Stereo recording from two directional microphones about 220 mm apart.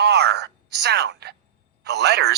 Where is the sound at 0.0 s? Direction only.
50° right (ahead or behind).